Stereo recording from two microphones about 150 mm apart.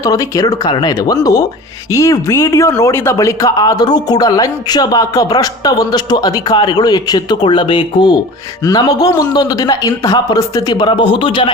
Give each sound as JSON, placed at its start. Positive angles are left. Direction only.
{"t": 0.0, "sound": "speech", "side_deg": 25}